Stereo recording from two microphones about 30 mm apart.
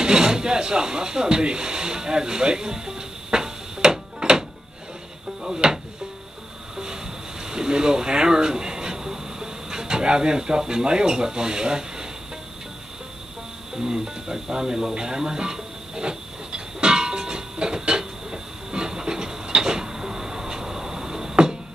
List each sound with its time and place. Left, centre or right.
0.0 s speech: right
7.4 s speech: right
13.7 s music: right